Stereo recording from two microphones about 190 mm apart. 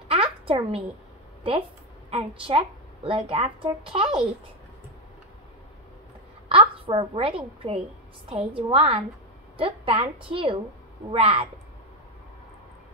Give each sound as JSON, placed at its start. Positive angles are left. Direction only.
{"t": 0.1, "sound": "a sound", "side_deg": -30}
{"t": 2.0, "sound": "a woman's voice", "side_deg": -30}
{"t": 6.5, "sound": "a woman's voice", "side_deg": -30}